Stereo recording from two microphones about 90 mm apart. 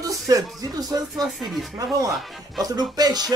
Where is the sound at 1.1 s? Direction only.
Centre (ahead or behind).